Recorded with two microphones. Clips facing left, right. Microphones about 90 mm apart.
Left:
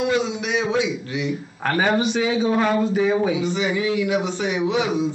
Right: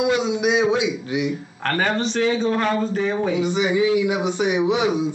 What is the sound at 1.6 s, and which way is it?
Speech, 10° left (ahead or behind).